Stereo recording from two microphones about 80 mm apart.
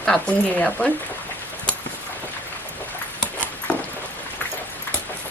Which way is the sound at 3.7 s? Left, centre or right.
Centre.